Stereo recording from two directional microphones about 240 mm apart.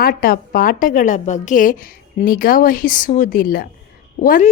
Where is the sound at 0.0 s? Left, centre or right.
Left.